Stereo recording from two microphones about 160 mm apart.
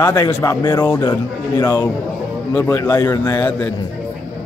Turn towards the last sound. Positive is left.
turn(degrees=15)  # may be behind; listen again after turning